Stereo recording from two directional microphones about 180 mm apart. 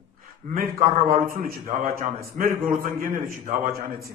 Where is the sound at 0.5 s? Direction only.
50° right (ahead or behind).